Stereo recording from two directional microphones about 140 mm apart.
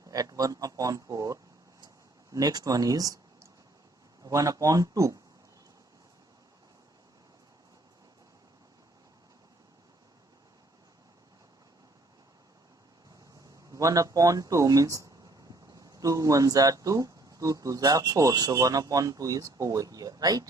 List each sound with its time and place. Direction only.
0.0 s a man's voice: 25° right (ahead or behind)
13.7 s speech: 25° right (ahead or behind)